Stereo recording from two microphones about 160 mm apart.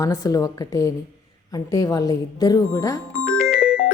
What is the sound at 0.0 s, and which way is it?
A woman's voice, 20° left (ahead or behind).